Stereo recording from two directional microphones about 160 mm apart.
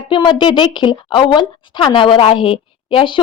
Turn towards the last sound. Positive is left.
turn(degrees=30)  # may be behind; listen again after turning